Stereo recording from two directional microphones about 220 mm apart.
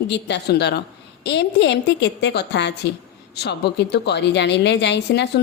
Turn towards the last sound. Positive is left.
turn(degrees=50)  # may be behind; listen again after turning